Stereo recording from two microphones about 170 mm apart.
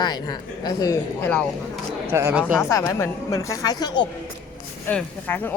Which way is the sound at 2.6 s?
20° left (ahead or behind).